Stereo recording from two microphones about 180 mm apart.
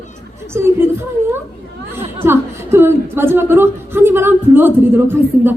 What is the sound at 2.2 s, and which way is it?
Speech, 15° right (ahead or behind).